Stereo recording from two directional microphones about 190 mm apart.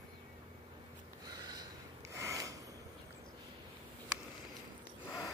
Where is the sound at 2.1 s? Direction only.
15° right (ahead or behind).